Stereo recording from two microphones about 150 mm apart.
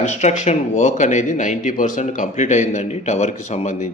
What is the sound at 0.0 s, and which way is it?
Speech, 50° left (ahead or behind).